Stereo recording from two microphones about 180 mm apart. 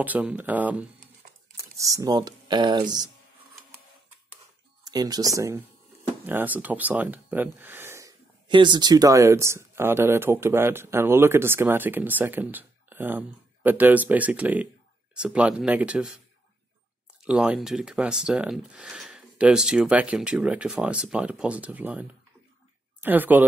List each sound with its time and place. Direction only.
0.0 s speech: 5° right (ahead or behind); by 3.1 s 25° right (ahead or behind)
4.8 s speech: 20° right (ahead or behind)
7.5 s gasp: 10° right (ahead or behind)
8.5 s speech: 25° right (ahead or behind); by 16.2 s 5° right (ahead or behind)
17.2 s speech: 5° right (ahead or behind)
23.0 s speech: 10° right (ahead or behind)